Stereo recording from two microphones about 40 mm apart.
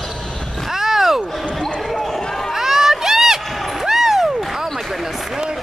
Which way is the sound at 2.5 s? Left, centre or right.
Centre.